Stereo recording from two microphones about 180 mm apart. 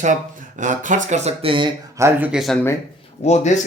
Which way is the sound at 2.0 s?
15° right (ahead or behind).